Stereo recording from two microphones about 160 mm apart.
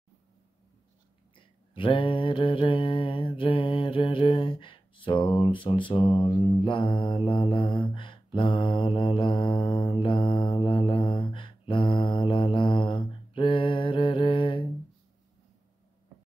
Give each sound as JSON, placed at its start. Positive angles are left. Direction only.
{"t": 1.8, "sound": "mantra", "side_deg": 30}